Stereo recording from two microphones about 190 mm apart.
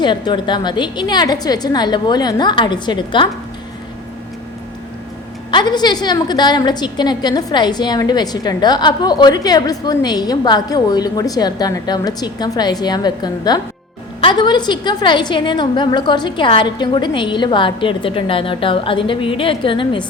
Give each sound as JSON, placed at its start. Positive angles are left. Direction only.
{"t": 0.0, "sound": "a woman's voice", "side_deg": 25}
{"t": 5.5, "sound": "a woman's voice", "side_deg": 25}